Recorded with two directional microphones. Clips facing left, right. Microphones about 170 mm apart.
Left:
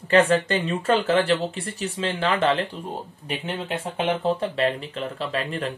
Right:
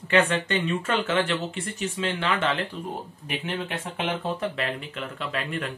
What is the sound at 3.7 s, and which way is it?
Speech, 25° left (ahead or behind).